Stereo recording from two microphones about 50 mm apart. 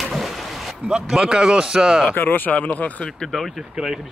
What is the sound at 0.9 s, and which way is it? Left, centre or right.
Speech, centre.